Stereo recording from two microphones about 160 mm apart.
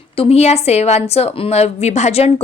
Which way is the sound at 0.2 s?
40° left (ahead or behind).